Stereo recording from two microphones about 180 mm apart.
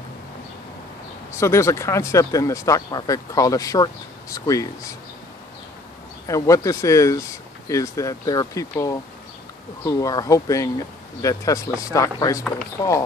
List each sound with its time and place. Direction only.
1.3 s speech: 15° left (ahead or behind)
6.2 s speech: 20° left (ahead or behind)